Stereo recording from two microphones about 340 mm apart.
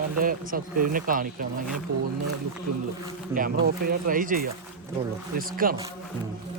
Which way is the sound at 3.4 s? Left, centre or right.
Right.